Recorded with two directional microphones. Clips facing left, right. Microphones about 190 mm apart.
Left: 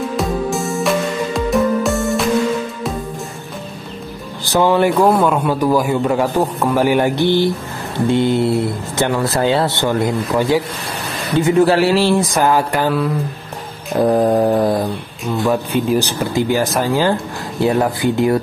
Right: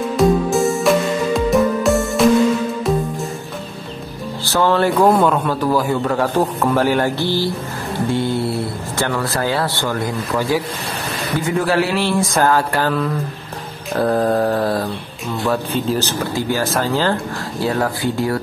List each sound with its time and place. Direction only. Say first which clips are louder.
0.2 s music: right 8 dB; centre (ahead or behind)
4.5 s a man's voice: left 2 dB; 15° left (ahead or behind)
12.2 s a man's voice: left 1 dB; 15° left (ahead or behind)